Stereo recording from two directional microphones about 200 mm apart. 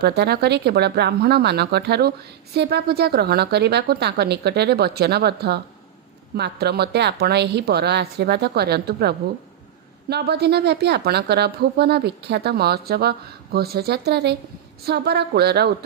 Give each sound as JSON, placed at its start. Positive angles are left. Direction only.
{"t": 0.0, "sound": "a woman's voice", "side_deg": -55}